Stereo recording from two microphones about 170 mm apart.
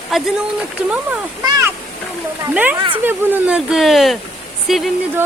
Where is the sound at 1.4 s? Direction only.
20° right (ahead or behind).